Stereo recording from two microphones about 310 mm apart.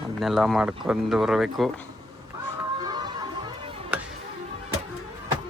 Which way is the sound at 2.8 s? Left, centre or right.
Centre.